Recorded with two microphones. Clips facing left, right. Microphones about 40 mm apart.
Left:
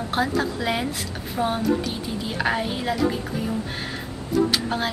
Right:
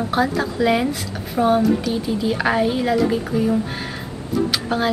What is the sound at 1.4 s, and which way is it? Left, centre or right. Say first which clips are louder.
Speech: right 7 dB; right.